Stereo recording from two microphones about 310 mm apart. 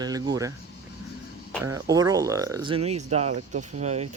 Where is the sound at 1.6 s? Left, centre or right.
Centre.